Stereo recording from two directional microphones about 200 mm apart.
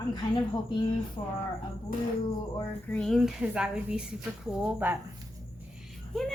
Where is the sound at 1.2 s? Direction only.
25° left (ahead or behind).